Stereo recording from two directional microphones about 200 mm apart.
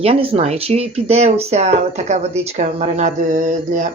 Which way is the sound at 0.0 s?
30° right (ahead or behind).